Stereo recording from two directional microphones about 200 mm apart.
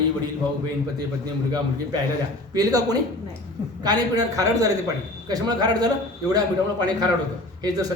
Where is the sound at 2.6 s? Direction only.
20° right (ahead or behind).